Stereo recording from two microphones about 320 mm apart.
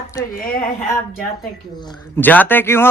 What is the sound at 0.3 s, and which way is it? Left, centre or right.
Speech, left.